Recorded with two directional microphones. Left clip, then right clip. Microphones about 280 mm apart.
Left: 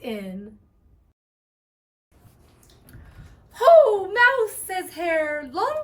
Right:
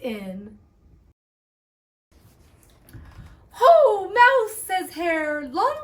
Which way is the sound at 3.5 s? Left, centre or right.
Centre.